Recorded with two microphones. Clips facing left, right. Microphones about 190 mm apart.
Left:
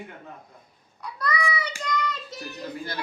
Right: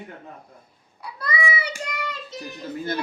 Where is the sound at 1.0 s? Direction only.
10° right (ahead or behind).